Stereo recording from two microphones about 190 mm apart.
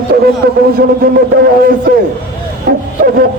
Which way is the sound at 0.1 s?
55° right (ahead or behind).